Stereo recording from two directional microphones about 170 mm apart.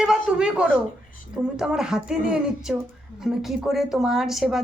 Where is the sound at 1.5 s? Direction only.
5° right (ahead or behind).